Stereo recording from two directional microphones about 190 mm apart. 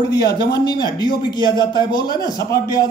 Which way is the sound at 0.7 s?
20° left (ahead or behind).